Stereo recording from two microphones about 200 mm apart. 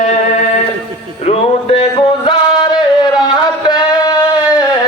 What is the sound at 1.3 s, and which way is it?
Music, 30° left (ahead or behind).